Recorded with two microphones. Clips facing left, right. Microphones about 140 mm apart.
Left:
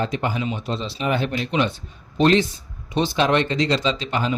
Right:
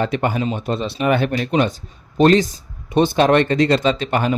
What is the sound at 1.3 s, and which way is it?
A man's voice, 45° right (ahead or behind).